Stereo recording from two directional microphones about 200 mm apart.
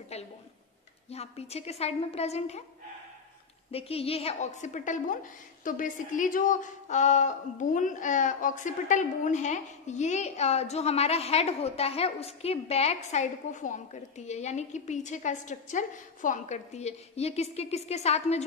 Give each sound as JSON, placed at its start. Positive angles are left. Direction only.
{"t": 0.1, "sound": "a sound", "side_deg": 30}
{"t": 1.1, "sound": "a woman's voice", "side_deg": 30}
{"t": 3.7, "sound": "a woman's voice", "side_deg": 30}